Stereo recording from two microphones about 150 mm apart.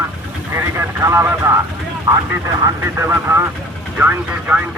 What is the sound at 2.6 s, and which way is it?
Speech, 15° right (ahead or behind).